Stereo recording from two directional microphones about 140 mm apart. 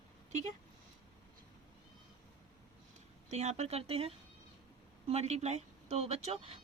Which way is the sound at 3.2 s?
55° right (ahead or behind).